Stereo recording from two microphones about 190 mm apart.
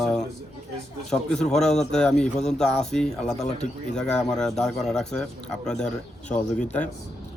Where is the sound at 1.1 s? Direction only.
5° left (ahead or behind).